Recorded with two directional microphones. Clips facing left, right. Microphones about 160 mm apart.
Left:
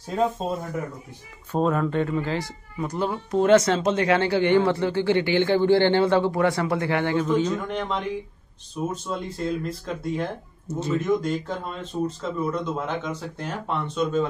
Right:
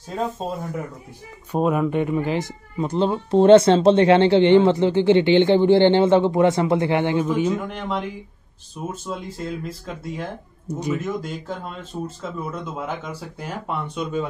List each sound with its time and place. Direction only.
1.5 s speech: 15° right (ahead or behind)
7.3 s speech: 10° right (ahead or behind)
10.7 s speech: 15° right (ahead or behind)
11.0 s speech: 5° right (ahead or behind)